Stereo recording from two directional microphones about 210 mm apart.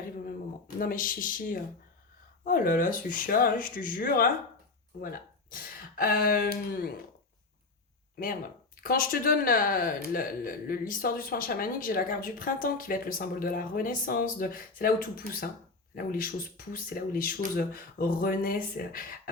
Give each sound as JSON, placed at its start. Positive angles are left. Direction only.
{"t": 0.8, "sound": "speech", "side_deg": 40}
{"t": 8.8, "sound": "speech", "side_deg": 45}